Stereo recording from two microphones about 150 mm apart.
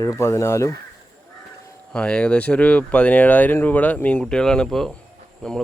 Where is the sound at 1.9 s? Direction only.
10° left (ahead or behind).